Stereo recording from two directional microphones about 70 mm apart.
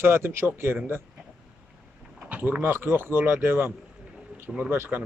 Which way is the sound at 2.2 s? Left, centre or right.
Right.